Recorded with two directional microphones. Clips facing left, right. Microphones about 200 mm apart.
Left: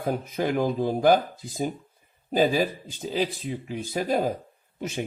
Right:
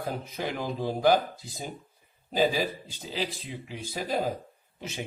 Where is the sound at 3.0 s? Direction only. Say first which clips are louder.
Left 7 dB; 50° left (ahead or behind).